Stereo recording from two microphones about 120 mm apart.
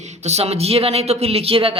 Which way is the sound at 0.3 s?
60° right (ahead or behind).